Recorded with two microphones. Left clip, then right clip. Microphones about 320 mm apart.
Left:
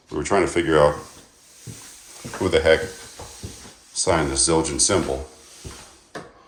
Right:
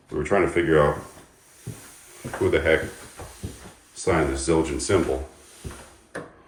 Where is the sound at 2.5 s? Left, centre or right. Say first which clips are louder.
Left 4 dB; centre.